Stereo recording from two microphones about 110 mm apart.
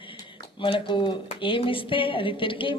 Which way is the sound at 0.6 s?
45° left (ahead or behind).